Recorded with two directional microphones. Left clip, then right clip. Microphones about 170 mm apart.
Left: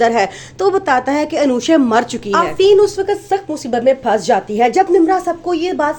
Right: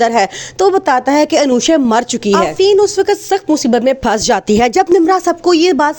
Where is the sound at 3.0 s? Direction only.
75° right (ahead or behind).